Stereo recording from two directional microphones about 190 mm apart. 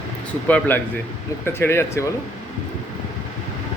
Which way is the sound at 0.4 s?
10° left (ahead or behind).